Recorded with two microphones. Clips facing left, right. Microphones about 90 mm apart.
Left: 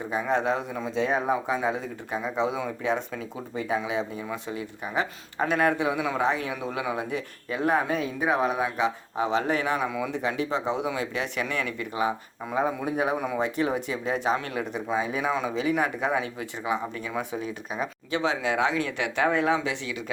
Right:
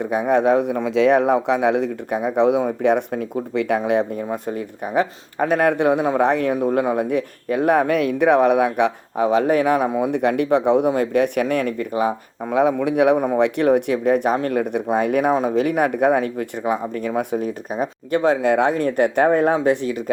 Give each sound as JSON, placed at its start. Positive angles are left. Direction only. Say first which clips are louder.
{"t": 0.0, "sound": "speech", "louder": "right 8 dB", "side_deg": -60}
{"t": 3.8, "sound": "speech", "louder": "right 9 dB", "side_deg": -60}
{"t": 12.7, "sound": "a man's voice", "louder": "right 10 dB", "side_deg": -70}
{"t": 13.1, "sound": "speech", "louder": "right 9 dB", "side_deg": -45}
{"t": 13.4, "sound": "speech", "louder": "right 10 dB", "side_deg": -60}